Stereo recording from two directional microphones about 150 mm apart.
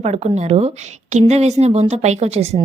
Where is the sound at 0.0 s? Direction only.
45° right (ahead or behind).